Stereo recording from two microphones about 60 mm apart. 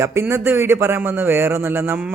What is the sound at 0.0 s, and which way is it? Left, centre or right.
Speech, right.